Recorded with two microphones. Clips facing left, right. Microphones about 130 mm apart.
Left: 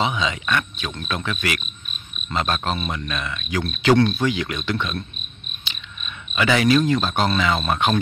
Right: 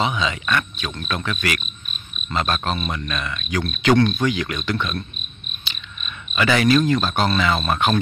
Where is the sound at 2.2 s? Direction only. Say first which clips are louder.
Right 1 dB; 20° left (ahead or behind).